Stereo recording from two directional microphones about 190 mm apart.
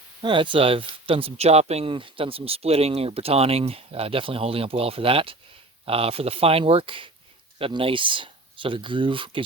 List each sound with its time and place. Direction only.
0.2 s speech: 25° right (ahead or behind)